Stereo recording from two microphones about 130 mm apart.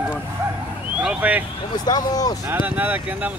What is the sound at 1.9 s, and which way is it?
Speech, 30° left (ahead or behind).